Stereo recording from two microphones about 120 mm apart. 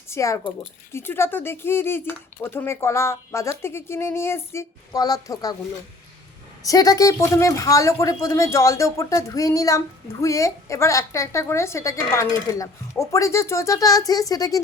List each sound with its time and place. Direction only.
0.1 s a man's voice: 25° left (ahead or behind)
6.6 s a man's voice: 30° left (ahead or behind)